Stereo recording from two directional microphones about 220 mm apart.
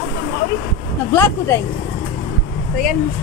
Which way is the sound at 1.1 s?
10° left (ahead or behind).